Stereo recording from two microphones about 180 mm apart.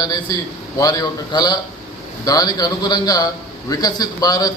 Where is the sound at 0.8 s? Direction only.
20° left (ahead or behind).